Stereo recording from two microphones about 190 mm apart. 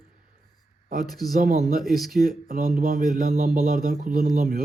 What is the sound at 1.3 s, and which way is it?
Speech, 50° right (ahead or behind).